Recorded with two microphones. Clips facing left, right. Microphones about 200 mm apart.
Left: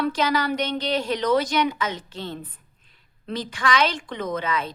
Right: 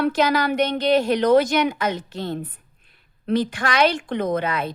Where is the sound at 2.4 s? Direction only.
65° right (ahead or behind).